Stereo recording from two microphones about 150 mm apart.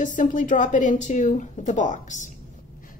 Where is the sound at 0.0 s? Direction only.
60° left (ahead or behind).